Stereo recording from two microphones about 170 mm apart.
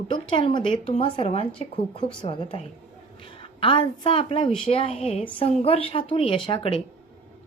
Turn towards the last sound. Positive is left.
turn(degrees=30)  # may be behind; listen again after turning